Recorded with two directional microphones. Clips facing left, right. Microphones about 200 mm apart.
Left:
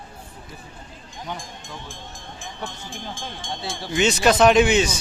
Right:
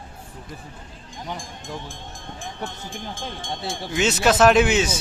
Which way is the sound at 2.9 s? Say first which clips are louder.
Right 1 dB; 50° right (ahead or behind).